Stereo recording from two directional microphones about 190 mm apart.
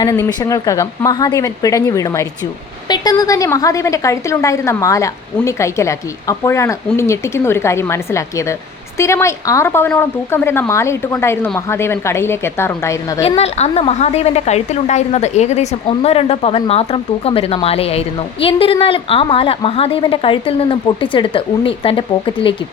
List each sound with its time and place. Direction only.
0.0 s a woman's voice: 20° left (ahead or behind)
13.2 s a woman's voice: 35° left (ahead or behind)